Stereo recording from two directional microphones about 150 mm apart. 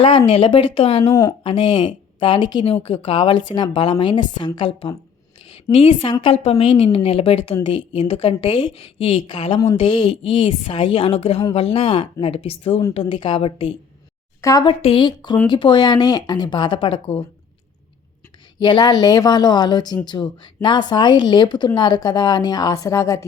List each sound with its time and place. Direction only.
0.0 s a woman's voice: 40° left (ahead or behind)
1.1 s speech: 20° left (ahead or behind)
1.5 s a woman's voice: 35° left (ahead or behind)
18.6 s speech: 30° left (ahead or behind)